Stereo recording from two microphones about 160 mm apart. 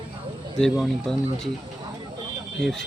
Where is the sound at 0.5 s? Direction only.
Centre (ahead or behind).